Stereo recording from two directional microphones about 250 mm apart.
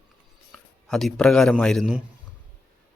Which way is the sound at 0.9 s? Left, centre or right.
Centre.